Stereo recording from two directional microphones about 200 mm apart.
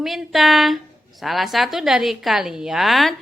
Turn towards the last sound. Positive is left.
turn(degrees=0)  # may be behind; listen again after turning